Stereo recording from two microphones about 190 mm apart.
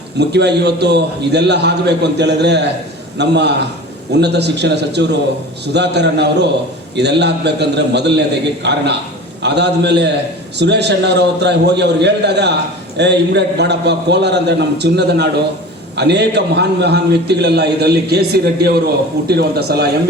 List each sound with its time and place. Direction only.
0.2 s a man's voice: 60° right (ahead or behind)